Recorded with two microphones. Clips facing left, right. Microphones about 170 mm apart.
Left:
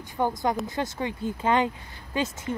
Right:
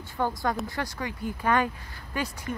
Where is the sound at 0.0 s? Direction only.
20° left (ahead or behind).